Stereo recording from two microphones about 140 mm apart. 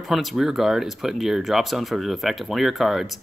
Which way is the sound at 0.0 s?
Centre (ahead or behind).